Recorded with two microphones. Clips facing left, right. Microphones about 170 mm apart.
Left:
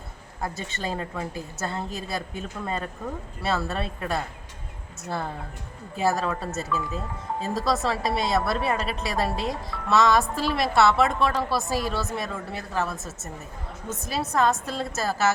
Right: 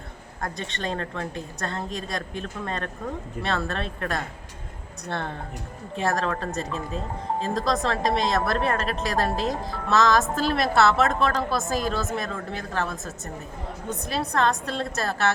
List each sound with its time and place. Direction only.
0.4 s a woman's voice: 5° left (ahead or behind)
6.7 s speech: 30° right (ahead or behind)
7.4 s a woman's voice: 5° left (ahead or behind)